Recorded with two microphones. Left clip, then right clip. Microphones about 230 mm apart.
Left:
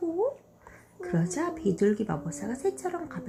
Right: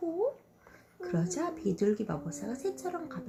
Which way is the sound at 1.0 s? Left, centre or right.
Left.